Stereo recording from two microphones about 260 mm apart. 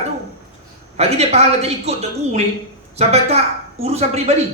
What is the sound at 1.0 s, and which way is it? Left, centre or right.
Speech, right.